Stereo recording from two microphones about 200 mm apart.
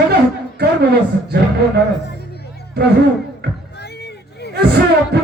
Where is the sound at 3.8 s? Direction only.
55° left (ahead or behind).